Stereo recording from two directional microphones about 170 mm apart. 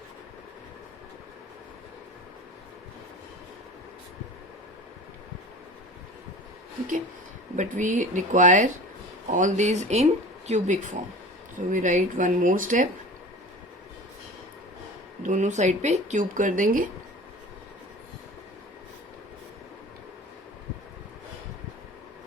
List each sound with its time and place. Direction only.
7.5 s speech: 45° right (ahead or behind)
15.2 s speech: 45° right (ahead or behind)